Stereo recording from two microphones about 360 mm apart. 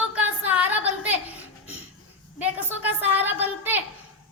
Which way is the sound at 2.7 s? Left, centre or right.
Centre.